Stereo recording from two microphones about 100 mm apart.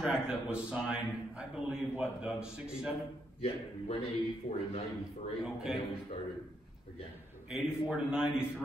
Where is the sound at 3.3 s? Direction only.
90° left.